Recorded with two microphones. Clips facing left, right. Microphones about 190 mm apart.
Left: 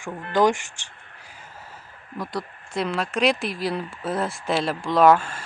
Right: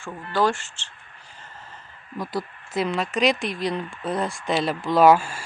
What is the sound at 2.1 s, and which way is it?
Speech, centre (ahead or behind).